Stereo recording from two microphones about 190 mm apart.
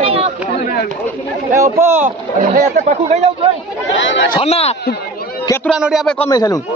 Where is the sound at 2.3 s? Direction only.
40° right (ahead or behind).